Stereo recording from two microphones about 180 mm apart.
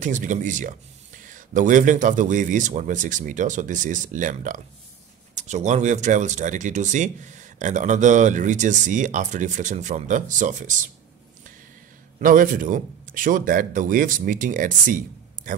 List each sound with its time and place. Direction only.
0.0 s speech: 45° right (ahead or behind)
12.2 s speech: 50° right (ahead or behind)